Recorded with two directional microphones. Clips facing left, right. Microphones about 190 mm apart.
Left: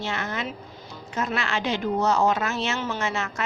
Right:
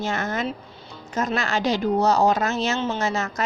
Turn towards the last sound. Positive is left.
turn(degrees=-40)  # may be behind; listen again after turning